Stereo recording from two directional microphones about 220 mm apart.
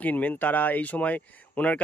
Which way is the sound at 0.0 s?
5° left (ahead or behind).